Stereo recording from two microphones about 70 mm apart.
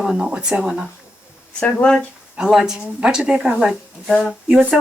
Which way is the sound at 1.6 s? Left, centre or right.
Centre.